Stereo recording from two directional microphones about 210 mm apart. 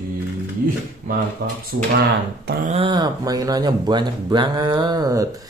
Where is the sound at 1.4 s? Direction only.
45° right (ahead or behind).